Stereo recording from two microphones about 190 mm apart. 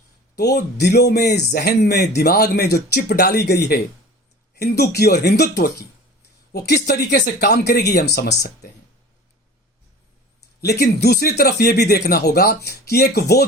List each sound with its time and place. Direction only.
0.3 s speech: 60° left (ahead or behind)
10.6 s speech: 60° left (ahead or behind)